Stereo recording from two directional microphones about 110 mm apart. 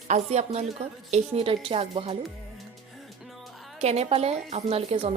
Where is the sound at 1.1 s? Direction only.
60° right (ahead or behind).